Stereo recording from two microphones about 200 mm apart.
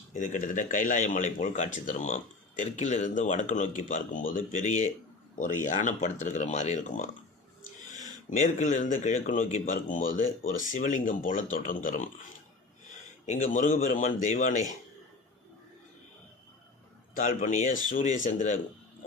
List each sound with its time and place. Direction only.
0.1 s speech: 40° left (ahead or behind)
13.2 s speech: 35° left (ahead or behind)
17.2 s speech: 40° left (ahead or behind)